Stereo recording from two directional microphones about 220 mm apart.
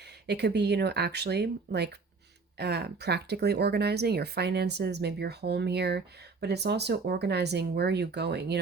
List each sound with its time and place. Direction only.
0.3 s speech: 50° right (ahead or behind)